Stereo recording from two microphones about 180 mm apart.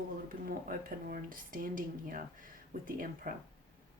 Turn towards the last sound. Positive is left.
turn(degrees=-50)  # may be behind; listen again after turning